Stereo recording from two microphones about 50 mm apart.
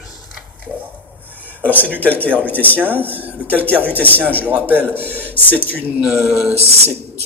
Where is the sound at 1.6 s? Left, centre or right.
Left.